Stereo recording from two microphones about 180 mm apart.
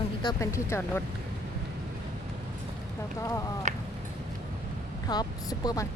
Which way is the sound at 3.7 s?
40° right (ahead or behind).